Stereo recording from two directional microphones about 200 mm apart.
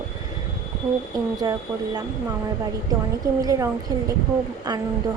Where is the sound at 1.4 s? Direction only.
20° right (ahead or behind).